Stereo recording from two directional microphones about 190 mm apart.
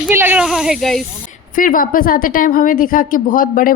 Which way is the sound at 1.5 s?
45° left (ahead or behind).